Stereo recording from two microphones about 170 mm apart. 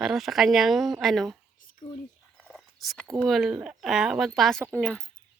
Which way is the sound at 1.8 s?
35° left (ahead or behind).